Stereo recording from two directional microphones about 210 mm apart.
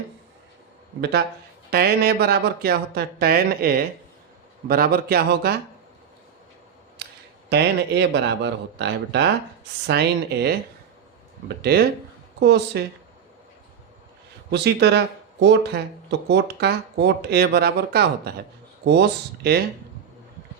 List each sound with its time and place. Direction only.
1.7 s speech: 50° right (ahead or behind)
7.0 s a sound: 50° right (ahead or behind)
7.5 s speech: 50° right (ahead or behind)
14.5 s speech: 55° right (ahead or behind)